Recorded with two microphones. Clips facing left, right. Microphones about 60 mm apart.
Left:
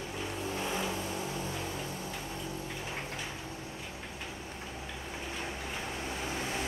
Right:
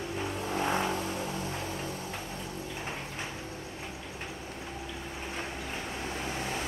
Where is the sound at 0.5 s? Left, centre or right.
Right.